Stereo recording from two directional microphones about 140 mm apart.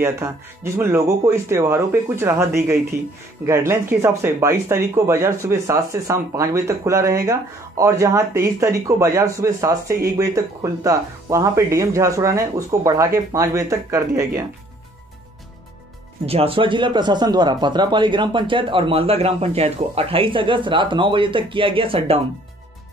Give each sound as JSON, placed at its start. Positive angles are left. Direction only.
{"t": 0.0, "sound": "speech", "side_deg": -20}
{"t": 16.3, "sound": "speech", "side_deg": -45}